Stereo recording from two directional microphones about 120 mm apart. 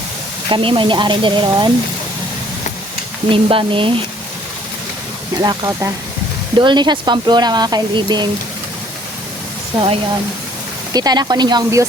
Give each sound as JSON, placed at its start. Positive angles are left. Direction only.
{"t": 0.5, "sound": "speech", "side_deg": -45}
{"t": 3.2, "sound": "speech", "side_deg": -45}
{"t": 5.4, "sound": "speech", "side_deg": -30}
{"t": 10.9, "sound": "speech", "side_deg": -35}